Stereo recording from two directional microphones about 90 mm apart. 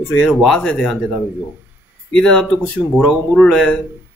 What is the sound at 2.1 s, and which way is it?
Speech, 10° left (ahead or behind).